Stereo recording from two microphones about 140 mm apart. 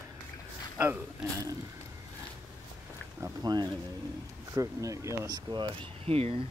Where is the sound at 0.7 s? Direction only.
15° right (ahead or behind).